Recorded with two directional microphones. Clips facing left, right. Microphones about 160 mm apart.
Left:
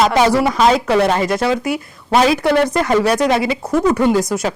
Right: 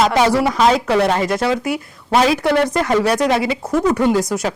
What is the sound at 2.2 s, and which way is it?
Speech, 10° left (ahead or behind).